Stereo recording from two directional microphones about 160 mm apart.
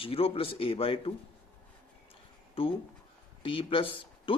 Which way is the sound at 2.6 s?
35° left (ahead or behind).